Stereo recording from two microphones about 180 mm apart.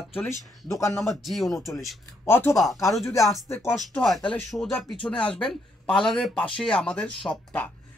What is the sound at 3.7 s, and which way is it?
Speech, centre (ahead or behind).